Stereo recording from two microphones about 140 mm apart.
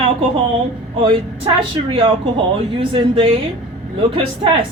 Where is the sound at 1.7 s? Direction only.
40° right (ahead or behind).